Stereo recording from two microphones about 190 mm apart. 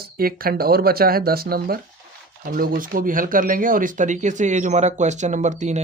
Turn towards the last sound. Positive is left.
turn(degrees=-40)  # may be behind; listen again after turning